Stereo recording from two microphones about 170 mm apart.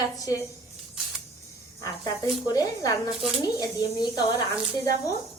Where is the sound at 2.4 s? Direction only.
20° left (ahead or behind).